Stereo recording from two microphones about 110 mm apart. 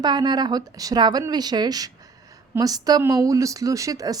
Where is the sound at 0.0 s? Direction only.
40° right (ahead or behind).